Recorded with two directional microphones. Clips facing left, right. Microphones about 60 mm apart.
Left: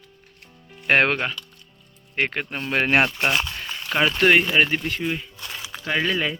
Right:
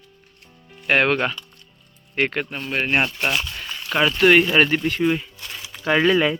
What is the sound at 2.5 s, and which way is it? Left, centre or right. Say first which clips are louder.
Speech: left 1 dB; left.